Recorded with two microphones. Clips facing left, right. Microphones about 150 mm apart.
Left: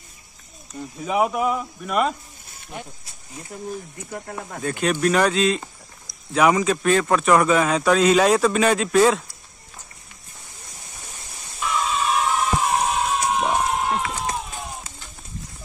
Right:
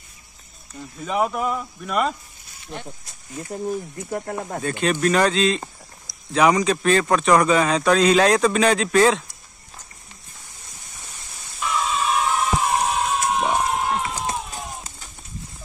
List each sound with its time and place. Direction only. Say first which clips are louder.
0.7 s speech: left 1 dB; 5° left (ahead or behind)
4.6 s speech: even; 10° left (ahead or behind)
11.6 s a sound: even; centre (ahead or behind)